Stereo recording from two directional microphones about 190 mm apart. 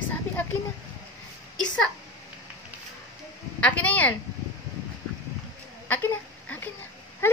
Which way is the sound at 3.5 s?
5° left (ahead or behind).